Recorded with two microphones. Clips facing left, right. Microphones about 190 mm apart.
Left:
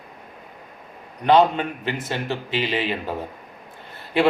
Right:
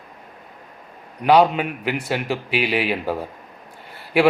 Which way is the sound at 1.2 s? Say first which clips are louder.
Right 1 dB; 10° right (ahead or behind).